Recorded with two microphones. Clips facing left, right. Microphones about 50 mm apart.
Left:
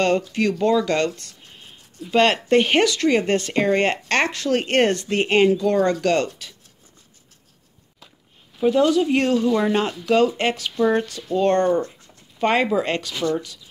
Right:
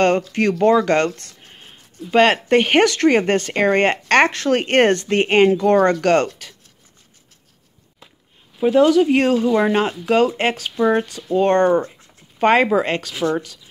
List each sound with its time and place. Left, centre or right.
0.0 s speech: right
8.5 s speech: right
10.8 s speech: centre
11.3 s speech: right